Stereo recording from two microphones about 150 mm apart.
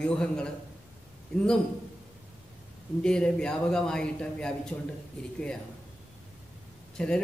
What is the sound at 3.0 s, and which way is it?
A man's voice, 5° left (ahead or behind).